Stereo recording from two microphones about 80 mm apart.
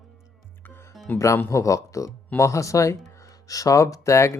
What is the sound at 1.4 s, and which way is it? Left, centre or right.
Speech, left.